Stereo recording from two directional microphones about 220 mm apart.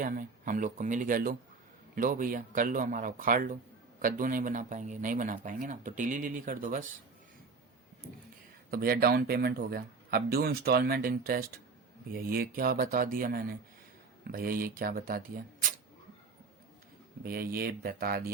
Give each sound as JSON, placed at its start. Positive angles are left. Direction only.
{"t": 0.0, "sound": "speech", "side_deg": -35}
{"t": 8.7, "sound": "speech", "side_deg": -40}
{"t": 17.2, "sound": "speech", "side_deg": -45}